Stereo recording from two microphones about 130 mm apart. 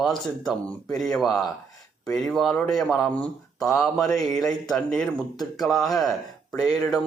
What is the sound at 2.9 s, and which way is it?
Speech, 15° left (ahead or behind).